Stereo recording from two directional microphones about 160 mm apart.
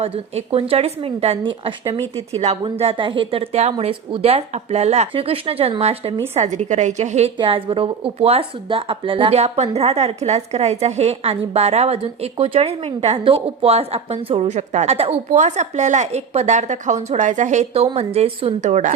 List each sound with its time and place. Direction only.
0.0 s a woman's voice: 35° right (ahead or behind)
7.3 s speech: 35° right (ahead or behind); by 18.9 s 50° right (ahead or behind)